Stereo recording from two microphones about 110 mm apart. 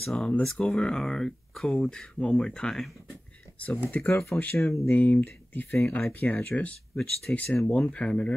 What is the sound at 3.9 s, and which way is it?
Speech, 15° left (ahead or behind).